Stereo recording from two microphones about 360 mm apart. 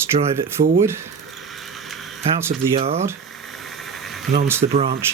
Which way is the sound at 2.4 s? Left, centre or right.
Centre.